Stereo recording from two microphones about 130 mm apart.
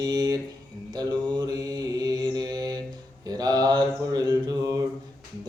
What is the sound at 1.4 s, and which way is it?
Mantra, 30° right (ahead or behind).